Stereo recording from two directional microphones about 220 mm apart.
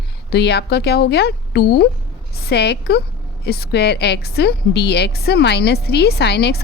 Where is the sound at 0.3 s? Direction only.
50° left (ahead or behind).